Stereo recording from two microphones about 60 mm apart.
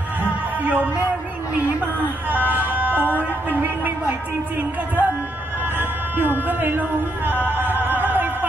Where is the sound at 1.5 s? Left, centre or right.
Right.